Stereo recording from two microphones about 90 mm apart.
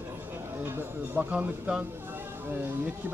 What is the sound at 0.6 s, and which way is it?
Speech, 25° right (ahead or behind).